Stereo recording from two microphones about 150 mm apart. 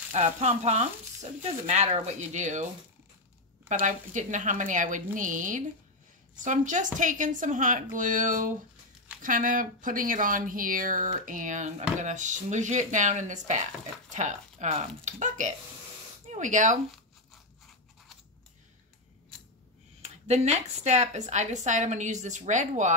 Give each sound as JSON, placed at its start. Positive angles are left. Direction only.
{"t": 0.1, "sound": "a woman's voice", "side_deg": -50}
{"t": 3.6, "sound": "speech", "side_deg": -55}
{"t": 20.0, "sound": "a woman's voice", "side_deg": -45}